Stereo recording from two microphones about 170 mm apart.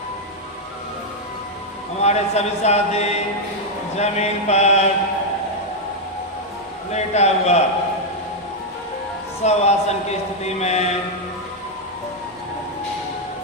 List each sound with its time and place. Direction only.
2.0 s speech: 40° left (ahead or behind)
6.9 s speech: 40° left (ahead or behind)
9.4 s speech: 40° left (ahead or behind)